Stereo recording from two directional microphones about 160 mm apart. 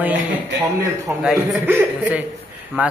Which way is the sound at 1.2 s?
Centre (ahead or behind).